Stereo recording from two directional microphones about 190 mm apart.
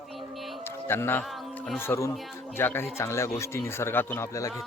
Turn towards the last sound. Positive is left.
turn(degrees=15)  # may be behind; listen again after turning